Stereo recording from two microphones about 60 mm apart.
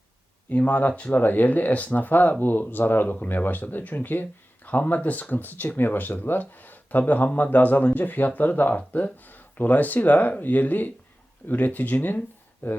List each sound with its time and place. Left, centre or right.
0.5 s speech: left